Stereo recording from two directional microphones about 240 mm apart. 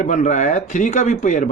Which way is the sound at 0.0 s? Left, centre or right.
Left.